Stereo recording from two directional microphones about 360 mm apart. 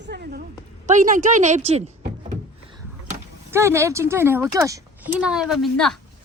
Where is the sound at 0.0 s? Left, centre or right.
Right.